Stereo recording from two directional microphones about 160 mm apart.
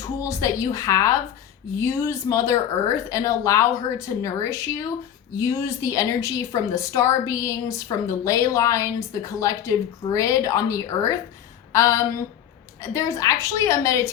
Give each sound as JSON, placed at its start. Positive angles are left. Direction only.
{"t": 0.0, "sound": "a woman's voice", "side_deg": 20}
{"t": 11.7, "sound": "a sound", "side_deg": 20}
{"t": 12.8, "sound": "a woman's voice", "side_deg": 20}